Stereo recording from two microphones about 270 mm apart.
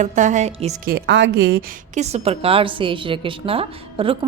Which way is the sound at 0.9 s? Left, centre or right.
Right.